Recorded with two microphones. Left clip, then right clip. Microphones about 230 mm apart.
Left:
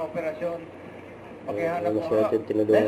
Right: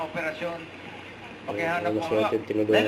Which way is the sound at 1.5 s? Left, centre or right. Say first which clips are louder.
Left 1 dB; centre.